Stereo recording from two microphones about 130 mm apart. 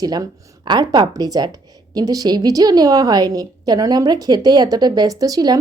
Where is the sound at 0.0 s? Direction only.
30° right (ahead or behind).